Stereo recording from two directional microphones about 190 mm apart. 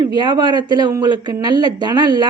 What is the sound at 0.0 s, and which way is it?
Speech, 25° right (ahead or behind).